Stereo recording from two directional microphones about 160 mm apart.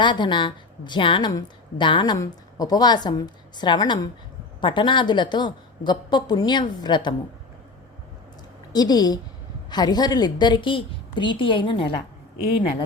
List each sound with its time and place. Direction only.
0.0 s a woman's voice: 30° left (ahead or behind)
8.7 s a woman's voice: 25° left (ahead or behind)